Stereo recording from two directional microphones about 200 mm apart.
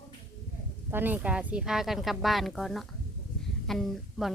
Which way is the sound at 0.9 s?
10° right (ahead or behind).